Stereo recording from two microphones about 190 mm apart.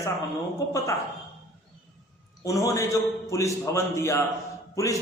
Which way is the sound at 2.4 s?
15° left (ahead or behind).